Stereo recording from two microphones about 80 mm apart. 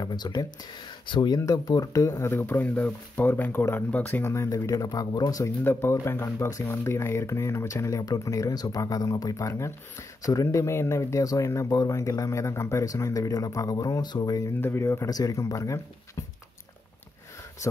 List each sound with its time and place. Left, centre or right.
0.0 s speech: left
1.0 s speech: left
1.4 s speech: left
2.4 s speech: left
4.3 s speech: left
5.6 s speech: left
14.6 s speech: left
15.0 s speech: left